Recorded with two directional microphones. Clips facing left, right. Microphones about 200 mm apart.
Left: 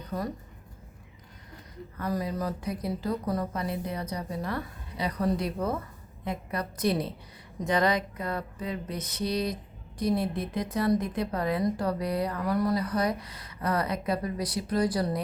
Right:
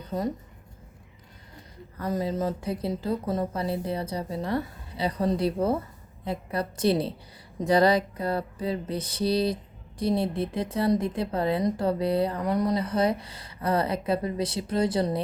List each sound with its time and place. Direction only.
0.1 s speech: 20° right (ahead or behind)
2.0 s speech: 25° right (ahead or behind)